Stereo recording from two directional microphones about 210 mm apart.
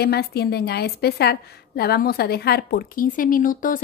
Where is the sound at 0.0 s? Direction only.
50° left (ahead or behind).